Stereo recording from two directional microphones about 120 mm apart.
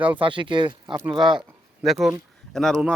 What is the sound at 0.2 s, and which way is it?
Speech, 45° right (ahead or behind).